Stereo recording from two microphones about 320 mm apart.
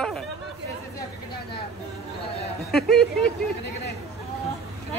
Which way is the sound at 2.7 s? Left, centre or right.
Centre.